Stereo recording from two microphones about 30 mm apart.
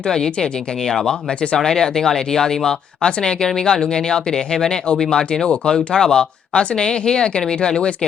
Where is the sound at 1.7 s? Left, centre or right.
Centre.